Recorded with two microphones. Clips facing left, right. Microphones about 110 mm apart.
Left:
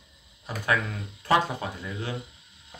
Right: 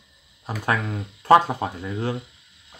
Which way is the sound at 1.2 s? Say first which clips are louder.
Right 8 dB; 40° right (ahead or behind).